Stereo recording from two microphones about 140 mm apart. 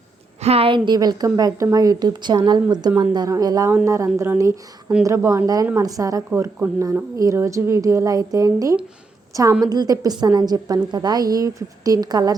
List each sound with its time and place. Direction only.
0.4 s a woman's voice: 45° right (ahead or behind); by 12.4 s 30° right (ahead or behind)